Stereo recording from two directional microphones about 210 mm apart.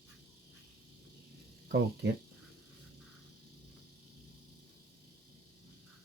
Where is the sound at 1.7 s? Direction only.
50° right (ahead or behind).